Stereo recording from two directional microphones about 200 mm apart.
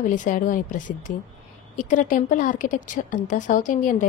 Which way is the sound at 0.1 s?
40° left (ahead or behind).